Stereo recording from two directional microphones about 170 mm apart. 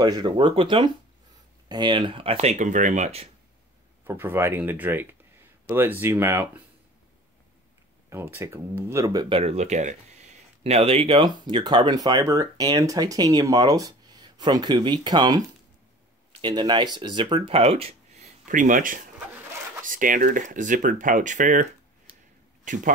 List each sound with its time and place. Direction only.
0.0 s speech: 25° right (ahead or behind); by 3.3 s 40° right (ahead or behind)
4.0 s speech: 15° right (ahead or behind)
8.1 s speech: 15° right (ahead or behind)
9.4 s speech: 40° right (ahead or behind)
22.7 s a man's voice: 50° right (ahead or behind)